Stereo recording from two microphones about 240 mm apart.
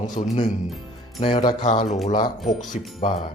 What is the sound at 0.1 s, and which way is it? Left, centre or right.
Speech, left.